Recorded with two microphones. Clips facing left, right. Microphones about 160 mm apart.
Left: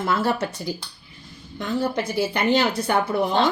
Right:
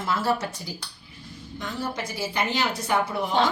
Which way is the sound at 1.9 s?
60° left (ahead or behind).